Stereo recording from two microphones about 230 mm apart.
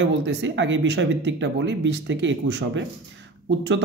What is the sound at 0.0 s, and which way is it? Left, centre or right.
Speech, right.